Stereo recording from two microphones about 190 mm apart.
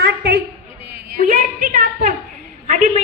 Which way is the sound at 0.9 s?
55° right (ahead or behind).